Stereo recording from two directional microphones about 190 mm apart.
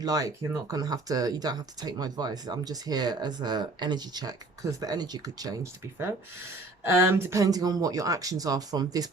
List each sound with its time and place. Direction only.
0.0 s speech: 20° right (ahead or behind)
6.8 s speech: 15° right (ahead or behind)